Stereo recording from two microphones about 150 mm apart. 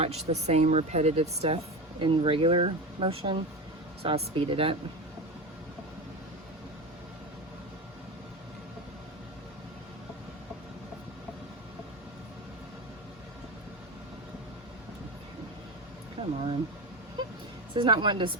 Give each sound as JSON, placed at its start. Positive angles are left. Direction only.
{"t": 0.0, "sound": "speech", "side_deg": -45}
{"t": 16.2, "sound": "a sound", "side_deg": -45}
{"t": 17.7, "sound": "speech", "side_deg": -30}